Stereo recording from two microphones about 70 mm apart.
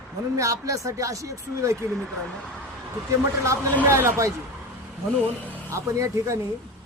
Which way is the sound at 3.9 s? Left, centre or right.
Right.